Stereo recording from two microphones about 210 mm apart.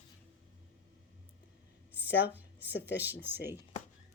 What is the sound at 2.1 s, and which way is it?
Speech, 55° left (ahead or behind).